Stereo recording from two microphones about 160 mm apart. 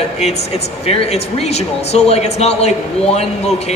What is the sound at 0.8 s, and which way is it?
A man's voice, 40° left (ahead or behind).